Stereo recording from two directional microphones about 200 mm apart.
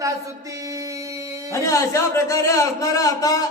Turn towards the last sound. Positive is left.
turn(degrees=15)  # may be behind; listen again after turning